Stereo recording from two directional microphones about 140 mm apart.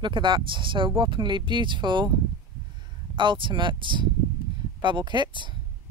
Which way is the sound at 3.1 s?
35° right (ahead or behind).